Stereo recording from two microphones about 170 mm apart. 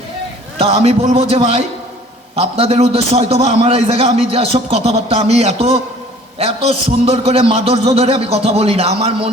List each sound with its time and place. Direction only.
0.6 s a man's voice: 35° right (ahead or behind)